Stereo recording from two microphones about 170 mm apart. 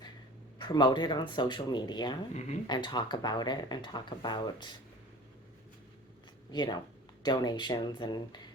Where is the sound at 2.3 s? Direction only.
40° left (ahead or behind).